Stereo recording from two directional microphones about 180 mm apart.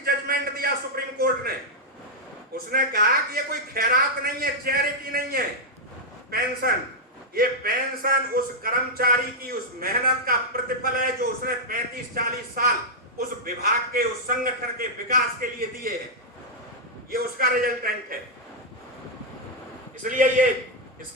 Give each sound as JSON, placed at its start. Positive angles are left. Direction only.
{"t": 0.0, "sound": "a sound", "side_deg": -55}
{"t": 2.7, "sound": "speech", "side_deg": -55}
{"t": 7.3, "sound": "a man's voice", "side_deg": -55}
{"t": 17.1, "sound": "speech", "side_deg": -55}
{"t": 20.0, "sound": "a man's voice", "side_deg": -45}